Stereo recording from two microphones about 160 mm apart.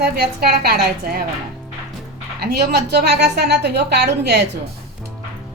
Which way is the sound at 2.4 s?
80° right.